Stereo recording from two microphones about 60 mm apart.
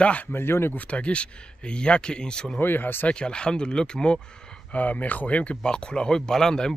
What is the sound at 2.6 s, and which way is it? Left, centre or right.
Speech, left.